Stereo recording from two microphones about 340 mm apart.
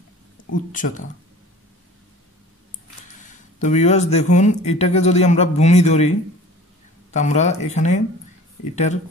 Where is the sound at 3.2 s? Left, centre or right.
Left.